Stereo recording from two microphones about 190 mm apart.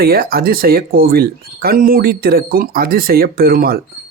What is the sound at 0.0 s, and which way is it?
Speech, 50° right (ahead or behind).